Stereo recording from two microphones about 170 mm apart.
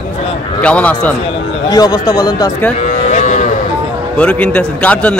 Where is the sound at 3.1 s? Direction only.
45° left (ahead or behind).